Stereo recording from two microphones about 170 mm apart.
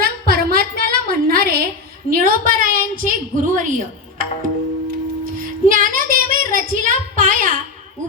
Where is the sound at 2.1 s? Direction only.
55° right (ahead or behind).